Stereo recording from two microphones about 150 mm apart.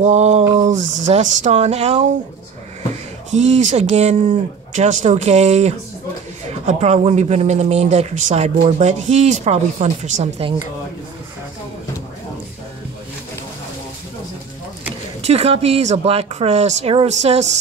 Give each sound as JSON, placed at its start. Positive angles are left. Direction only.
{"t": 0.0, "sound": "speech", "side_deg": -50}
{"t": 3.3, "sound": "speech", "side_deg": -50}
{"t": 15.2, "sound": "speech", "side_deg": -45}